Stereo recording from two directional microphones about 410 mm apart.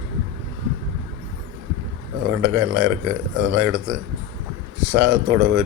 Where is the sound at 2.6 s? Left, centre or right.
Right.